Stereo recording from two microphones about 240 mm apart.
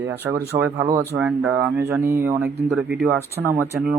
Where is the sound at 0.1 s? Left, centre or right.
Centre.